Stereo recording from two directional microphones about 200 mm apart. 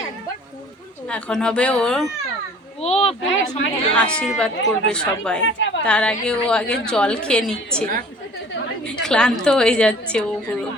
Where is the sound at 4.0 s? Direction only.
5° left (ahead or behind).